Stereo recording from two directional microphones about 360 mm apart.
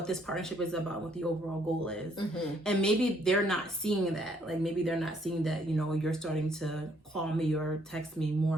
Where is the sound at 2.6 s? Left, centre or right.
Centre.